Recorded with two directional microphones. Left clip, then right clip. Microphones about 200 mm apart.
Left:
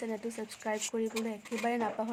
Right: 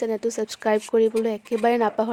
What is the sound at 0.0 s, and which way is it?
Speech, 40° right (ahead or behind).